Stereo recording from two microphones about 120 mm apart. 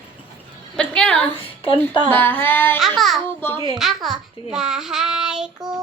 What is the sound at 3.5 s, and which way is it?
Speech, 40° right (ahead or behind).